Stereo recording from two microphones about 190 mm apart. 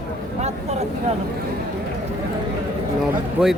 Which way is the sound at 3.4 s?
5° right (ahead or behind).